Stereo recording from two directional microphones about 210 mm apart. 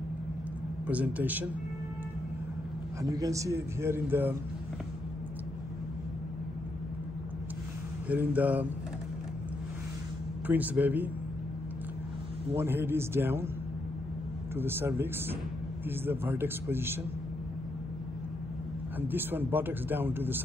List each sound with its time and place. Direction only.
0.8 s speech: 5° right (ahead or behind)
3.0 s speech: 15° right (ahead or behind)
8.1 s speech: 5° right (ahead or behind)
10.4 s speech: 10° right (ahead or behind)
12.5 s speech: 10° right (ahead or behind)
14.5 s speech: 10° right (ahead or behind)
18.9 s speech: 10° right (ahead or behind)